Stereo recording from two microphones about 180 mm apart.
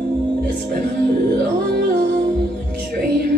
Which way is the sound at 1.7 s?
60° right (ahead or behind).